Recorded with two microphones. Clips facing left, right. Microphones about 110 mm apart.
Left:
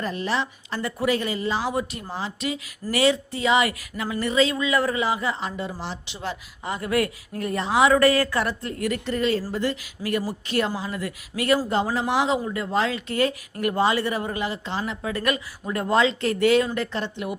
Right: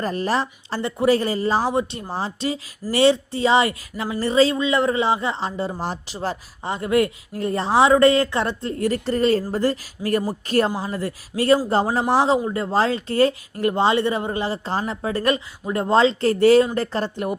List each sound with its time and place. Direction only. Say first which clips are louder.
0.0 s speech: right 4 dB; 40° right (ahead or behind)
0.8 s speech: right 5 dB; 25° right (ahead or behind)
1.7 s speech: right 4 dB; 30° right (ahead or behind)
5.8 s speech: right 5 dB; 45° right (ahead or behind)